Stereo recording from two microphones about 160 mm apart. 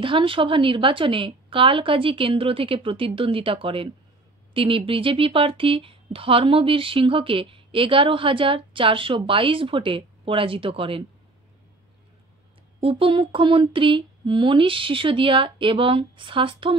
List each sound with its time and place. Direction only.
0.0 s speech: 35° right (ahead or behind)
12.8 s speech: 35° right (ahead or behind)